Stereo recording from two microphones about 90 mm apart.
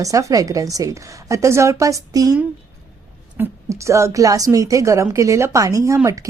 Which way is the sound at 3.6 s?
35° right (ahead or behind).